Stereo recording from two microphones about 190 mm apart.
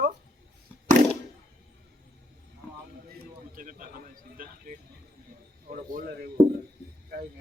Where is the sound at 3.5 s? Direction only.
45° right (ahead or behind).